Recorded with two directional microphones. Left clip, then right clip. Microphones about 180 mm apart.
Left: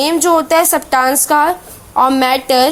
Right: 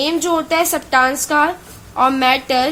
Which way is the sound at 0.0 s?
30° left (ahead or behind).